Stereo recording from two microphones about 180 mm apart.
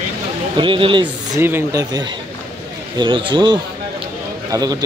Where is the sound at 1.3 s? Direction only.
15° right (ahead or behind).